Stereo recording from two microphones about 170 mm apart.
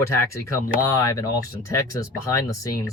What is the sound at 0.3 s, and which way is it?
Speech, 20° left (ahead or behind).